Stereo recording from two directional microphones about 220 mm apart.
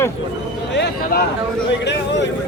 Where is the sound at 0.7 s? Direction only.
45° left (ahead or behind).